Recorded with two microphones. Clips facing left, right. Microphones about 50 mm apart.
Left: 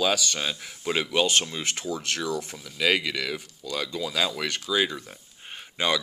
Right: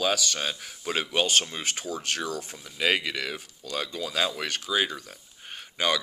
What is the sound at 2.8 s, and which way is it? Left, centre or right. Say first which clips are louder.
Speech: left 1 dB; centre.